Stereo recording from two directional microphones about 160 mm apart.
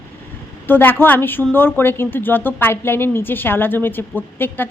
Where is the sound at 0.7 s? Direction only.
10° left (ahead or behind).